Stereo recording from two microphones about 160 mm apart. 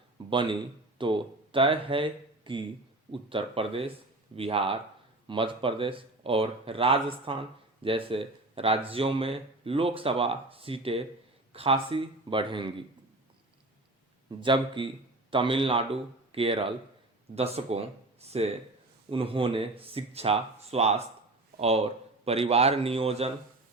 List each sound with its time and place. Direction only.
0.3 s speech: 30° right (ahead or behind)
14.3 s speech: 30° right (ahead or behind)